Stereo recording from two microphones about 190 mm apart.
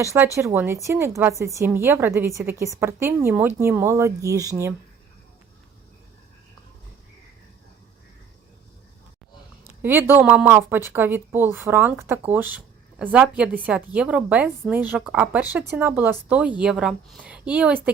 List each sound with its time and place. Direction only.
0.0 s speech: 15° right (ahead or behind)
9.8 s speech: 10° right (ahead or behind)